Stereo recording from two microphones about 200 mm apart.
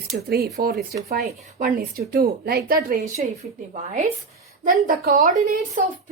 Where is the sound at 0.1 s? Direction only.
55° right (ahead or behind).